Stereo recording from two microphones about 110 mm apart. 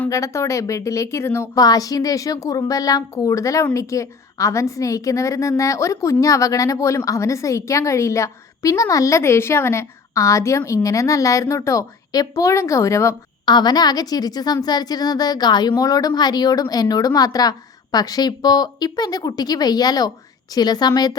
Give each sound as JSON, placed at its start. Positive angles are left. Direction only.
{"t": 0.1, "sound": "a woman's voice", "side_deg": 25}
{"t": 13.4, "sound": "a woman's voice", "side_deg": 40}